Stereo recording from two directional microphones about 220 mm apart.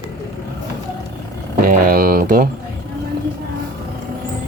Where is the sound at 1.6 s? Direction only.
40° right (ahead or behind).